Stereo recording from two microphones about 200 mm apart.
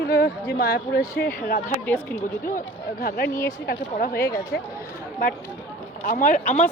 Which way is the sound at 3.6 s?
45° left (ahead or behind).